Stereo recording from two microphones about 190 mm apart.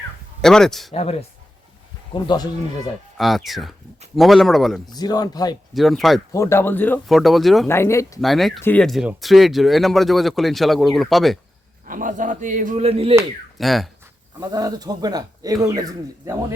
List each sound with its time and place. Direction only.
0.4 s speech: centre (ahead or behind)
2.1 s speech: 25° left (ahead or behind)
3.2 s speech: centre (ahead or behind)
4.9 s speech: 20° left (ahead or behind)
5.7 s speech: centre (ahead or behind)
6.3 s speech: 15° left (ahead or behind)
7.7 s speech: 15° left (ahead or behind)
8.2 s speech: centre (ahead or behind)
11.9 s speech: 45° right (ahead or behind)
13.6 s speech: centre (ahead or behind)
14.3 s speech: 20° right (ahead or behind)